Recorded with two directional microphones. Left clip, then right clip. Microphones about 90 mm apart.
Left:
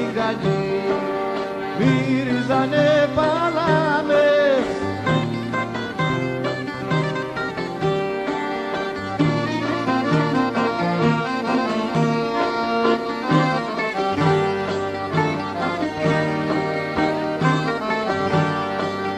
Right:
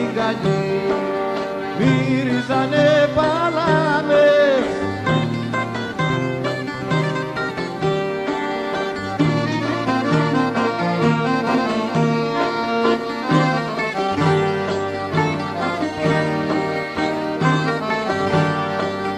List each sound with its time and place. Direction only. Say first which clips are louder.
0.2 s music: right 1 dB; 30° left (ahead or behind)
9.8 s music: right 1 dB; 35° left (ahead or behind)
16.0 s music: right 1 dB; 30° left (ahead or behind)